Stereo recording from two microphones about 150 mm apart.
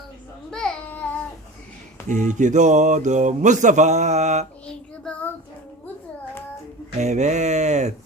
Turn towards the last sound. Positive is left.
turn(degrees=-50)  # may be behind; listen again after turning